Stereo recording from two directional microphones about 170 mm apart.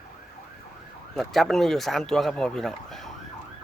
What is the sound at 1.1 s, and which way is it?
Speech, centre (ahead or behind).